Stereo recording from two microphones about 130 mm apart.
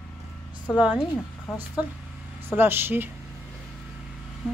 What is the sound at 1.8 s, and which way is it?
Speech, 10° right (ahead or behind).